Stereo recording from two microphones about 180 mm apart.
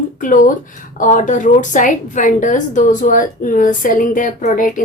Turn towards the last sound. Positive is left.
turn(degrees=45)  # may be behind; listen again after turning